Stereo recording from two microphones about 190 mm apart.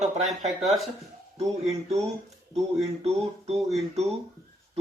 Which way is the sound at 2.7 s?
35° right (ahead or behind).